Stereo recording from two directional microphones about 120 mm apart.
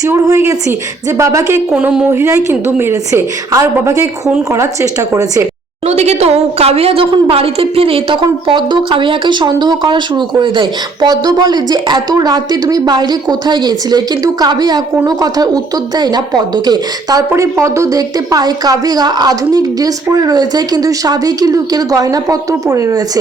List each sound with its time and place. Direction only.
0.0 s a woman's voice: 25° right (ahead or behind)
1.7 s a woman's voice: 10° right (ahead or behind); by 5.5 s 25° right (ahead or behind)
5.8 s a woman's voice: 65° right (ahead or behind)
8.2 s a woman's voice: 40° right (ahead or behind)